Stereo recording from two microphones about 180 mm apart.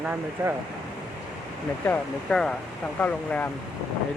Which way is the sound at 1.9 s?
5° left (ahead or behind).